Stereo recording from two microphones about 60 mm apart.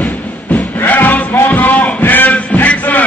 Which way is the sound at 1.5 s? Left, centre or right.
Left.